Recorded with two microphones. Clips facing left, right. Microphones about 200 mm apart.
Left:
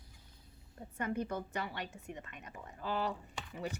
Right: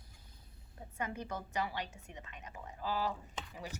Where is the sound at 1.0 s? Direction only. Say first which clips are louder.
Left 4 dB; 55° left (ahead or behind).